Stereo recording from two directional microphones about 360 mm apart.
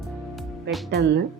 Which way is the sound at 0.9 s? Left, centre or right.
Right.